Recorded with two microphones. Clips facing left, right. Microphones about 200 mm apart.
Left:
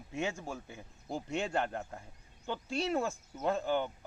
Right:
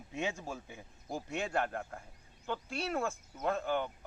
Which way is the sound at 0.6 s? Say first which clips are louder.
Left 2 dB; 10° right (ahead or behind).